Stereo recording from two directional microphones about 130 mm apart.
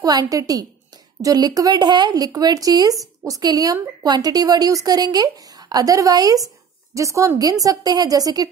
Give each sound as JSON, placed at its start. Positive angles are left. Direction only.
{"t": 0.0, "sound": "speech", "side_deg": -30}